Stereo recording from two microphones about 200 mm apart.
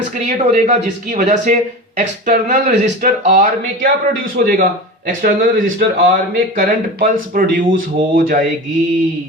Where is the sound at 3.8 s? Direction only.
50° right (ahead or behind).